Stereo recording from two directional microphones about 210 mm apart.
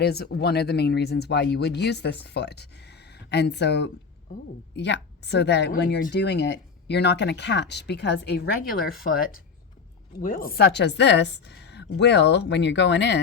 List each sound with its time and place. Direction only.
0.0 s a woman's voice: 50° left (ahead or behind)